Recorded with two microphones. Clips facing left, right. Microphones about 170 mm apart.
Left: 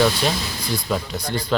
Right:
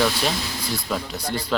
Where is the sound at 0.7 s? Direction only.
5° right (ahead or behind).